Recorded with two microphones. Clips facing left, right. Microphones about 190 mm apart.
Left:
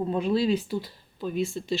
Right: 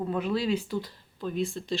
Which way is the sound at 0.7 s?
10° left (ahead or behind).